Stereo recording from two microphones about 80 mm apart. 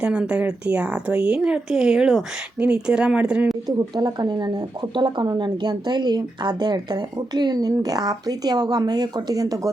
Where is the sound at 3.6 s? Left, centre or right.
Right.